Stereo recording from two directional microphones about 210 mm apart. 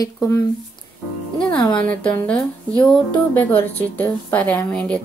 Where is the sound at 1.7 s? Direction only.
5° left (ahead or behind).